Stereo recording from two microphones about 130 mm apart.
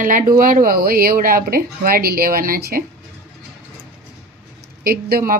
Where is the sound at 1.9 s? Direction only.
90° right.